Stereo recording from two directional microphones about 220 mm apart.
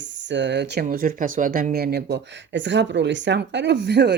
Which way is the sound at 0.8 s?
40° right (ahead or behind).